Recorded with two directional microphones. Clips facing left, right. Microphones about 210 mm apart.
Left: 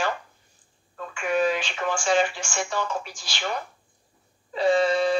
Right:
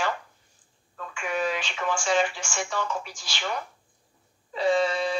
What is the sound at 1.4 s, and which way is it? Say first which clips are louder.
Speech: left 3 dB; 30° left (ahead or behind).